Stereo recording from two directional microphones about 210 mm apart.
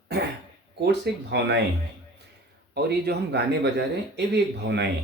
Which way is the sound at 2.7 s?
50° right (ahead or behind).